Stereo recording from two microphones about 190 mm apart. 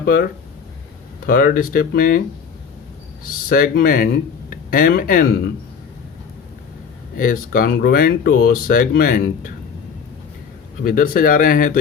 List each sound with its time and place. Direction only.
0.0 s speech: 50° left (ahead or behind)
1.3 s speech: 50° left (ahead or behind)
3.2 s speech: 50° left (ahead or behind)
7.2 s speech: 45° left (ahead or behind)
10.8 s speech: 45° left (ahead or behind)